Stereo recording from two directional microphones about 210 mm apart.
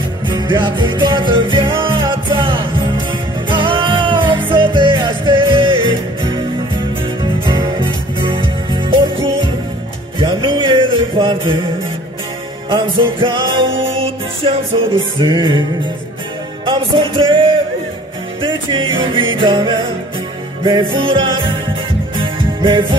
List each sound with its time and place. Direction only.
0.3 s music: 20° right (ahead or behind)
7.4 s music: 25° right (ahead or behind)
12.6 s music: 25° right (ahead or behind)
16.6 s music: 25° right (ahead or behind)
18.4 s music: 25° right (ahead or behind)